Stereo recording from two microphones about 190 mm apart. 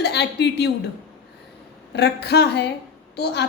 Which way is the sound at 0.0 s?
60° left (ahead or behind).